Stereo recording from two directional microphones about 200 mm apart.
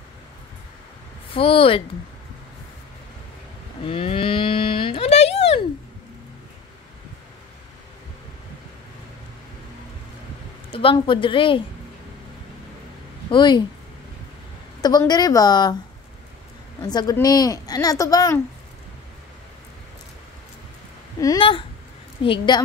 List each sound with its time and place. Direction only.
1.3 s speech: 25° left (ahead or behind)
3.8 s a sound: 25° left (ahead or behind)
10.7 s speech: 25° left (ahead or behind)
13.3 s speech: 20° left (ahead or behind)
14.8 s speech: 20° left (ahead or behind)
16.8 s speech: 20° left (ahead or behind)
21.2 s speech: 20° left (ahead or behind)